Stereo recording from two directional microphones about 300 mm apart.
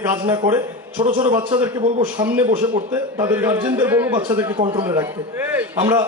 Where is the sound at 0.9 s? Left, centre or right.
Centre.